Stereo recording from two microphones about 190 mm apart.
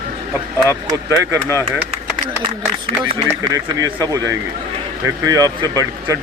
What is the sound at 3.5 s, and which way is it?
Speech, 15° right (ahead or behind).